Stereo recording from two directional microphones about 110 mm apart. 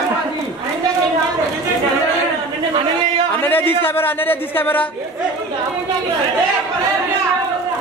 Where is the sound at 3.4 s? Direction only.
20° left (ahead or behind).